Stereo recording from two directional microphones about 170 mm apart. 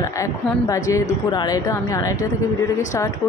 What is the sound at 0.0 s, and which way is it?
Speech, 20° left (ahead or behind).